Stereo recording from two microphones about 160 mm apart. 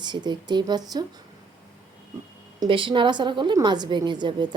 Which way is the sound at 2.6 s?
30° right (ahead or behind).